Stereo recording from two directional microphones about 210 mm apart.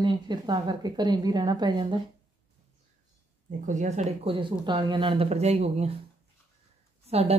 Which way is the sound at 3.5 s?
35° right (ahead or behind).